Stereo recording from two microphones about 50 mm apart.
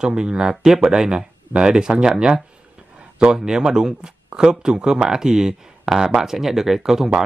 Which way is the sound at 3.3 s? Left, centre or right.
Centre.